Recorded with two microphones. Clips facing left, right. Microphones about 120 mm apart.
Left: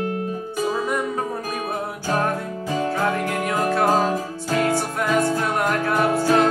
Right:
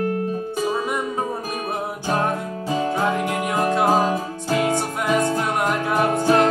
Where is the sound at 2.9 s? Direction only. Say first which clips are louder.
Right 1 dB; 15° right (ahead or behind).